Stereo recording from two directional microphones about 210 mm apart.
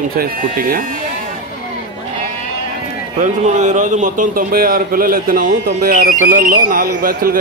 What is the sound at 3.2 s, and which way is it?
A man's voice, 35° right (ahead or behind).